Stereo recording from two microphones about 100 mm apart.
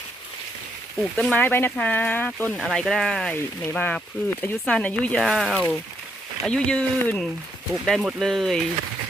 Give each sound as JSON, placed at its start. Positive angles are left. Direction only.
{"t": 1.1, "sound": "speech", "side_deg": 10}
{"t": 2.6, "sound": "speech", "side_deg": 0}
{"t": 5.2, "sound": "speech", "side_deg": 0}